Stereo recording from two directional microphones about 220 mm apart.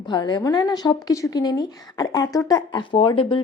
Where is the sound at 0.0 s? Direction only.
20° left (ahead or behind).